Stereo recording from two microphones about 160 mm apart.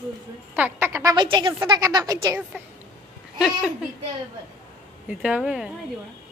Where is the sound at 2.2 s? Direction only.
10° right (ahead or behind).